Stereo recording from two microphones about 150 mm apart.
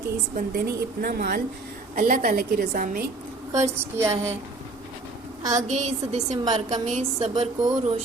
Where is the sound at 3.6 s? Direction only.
20° right (ahead or behind).